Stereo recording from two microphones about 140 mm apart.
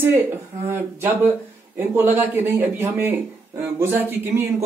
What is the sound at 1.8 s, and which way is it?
Speech, 15° right (ahead or behind).